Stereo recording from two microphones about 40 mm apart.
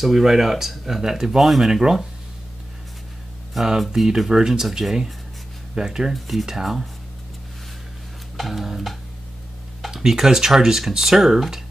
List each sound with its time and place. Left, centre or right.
0.0 s speech: centre
1.4 s tick-tock: centre
1.7 s speech: centre
3.6 s tick-tock: centre
3.9 s speech: centre
6.1 s tick-tock: centre
6.4 s speech: centre
8.4 s tick-tock: centre
9.8 s speech: centre